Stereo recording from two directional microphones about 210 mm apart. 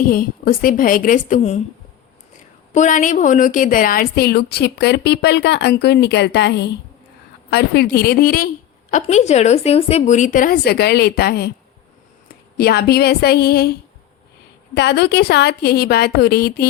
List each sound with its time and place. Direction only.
0.1 s a woman's voice: 45° left (ahead or behind)
12.5 s a woman's voice: 50° left (ahead or behind)
14.8 s a woman's voice: 55° left (ahead or behind)